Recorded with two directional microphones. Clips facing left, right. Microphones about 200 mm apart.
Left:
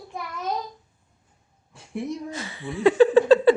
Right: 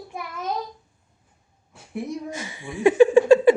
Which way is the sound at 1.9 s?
15° right (ahead or behind).